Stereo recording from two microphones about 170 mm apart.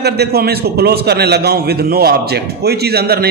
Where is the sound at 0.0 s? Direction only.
70° right (ahead or behind).